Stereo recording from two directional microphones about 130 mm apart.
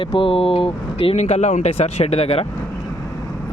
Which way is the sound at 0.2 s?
45° left (ahead or behind).